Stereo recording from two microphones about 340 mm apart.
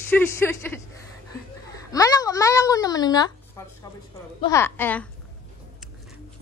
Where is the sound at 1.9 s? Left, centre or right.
Centre.